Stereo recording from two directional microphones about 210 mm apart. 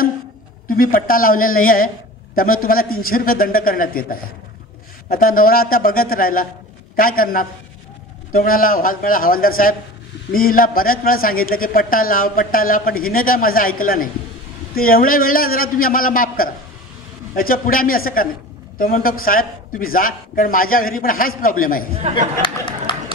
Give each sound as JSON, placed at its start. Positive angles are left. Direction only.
{"t": 0.7, "sound": "a man's voice", "side_deg": 40}
{"t": 22.9, "sound": "run", "side_deg": 20}